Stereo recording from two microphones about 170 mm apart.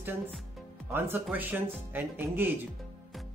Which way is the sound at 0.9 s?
10° right (ahead or behind).